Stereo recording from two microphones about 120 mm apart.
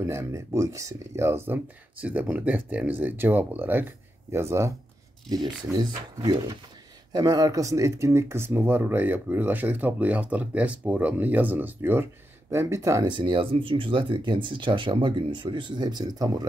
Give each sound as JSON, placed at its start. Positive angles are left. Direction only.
{"t": 0.0, "sound": "speech", "side_deg": -20}
{"t": 5.7, "sound": "speech", "side_deg": -10}
{"t": 6.2, "sound": "speech", "side_deg": -40}
{"t": 13.0, "sound": "speech", "side_deg": -40}